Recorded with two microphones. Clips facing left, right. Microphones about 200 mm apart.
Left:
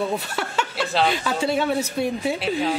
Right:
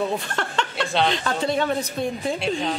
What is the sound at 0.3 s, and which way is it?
Speech, 5° left (ahead or behind).